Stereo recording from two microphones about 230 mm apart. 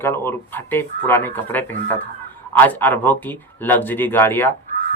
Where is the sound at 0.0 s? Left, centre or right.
Centre.